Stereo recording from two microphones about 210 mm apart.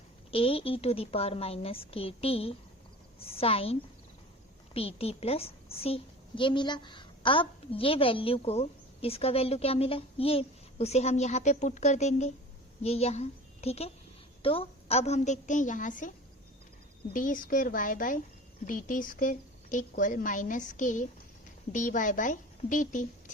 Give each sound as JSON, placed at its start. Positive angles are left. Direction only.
{"t": 0.3, "sound": "a woman's voice", "side_deg": 25}